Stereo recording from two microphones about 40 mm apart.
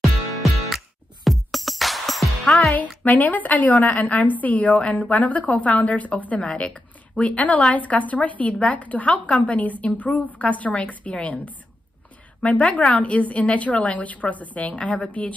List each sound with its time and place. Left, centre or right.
0.0 s music: centre
2.7 s a woman's voice: left
6.4 s a woman's voice: left